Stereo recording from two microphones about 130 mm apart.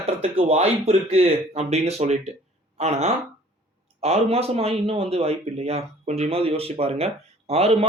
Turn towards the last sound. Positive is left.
turn(degrees=-50)  # may be behind; listen again after turning